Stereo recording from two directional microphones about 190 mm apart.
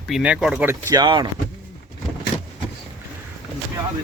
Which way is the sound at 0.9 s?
20° right (ahead or behind).